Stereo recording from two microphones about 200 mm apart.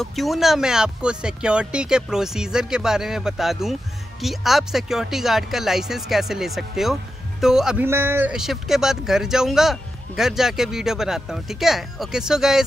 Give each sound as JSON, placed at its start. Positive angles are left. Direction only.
{"t": 0.0, "sound": "speech", "side_deg": 0}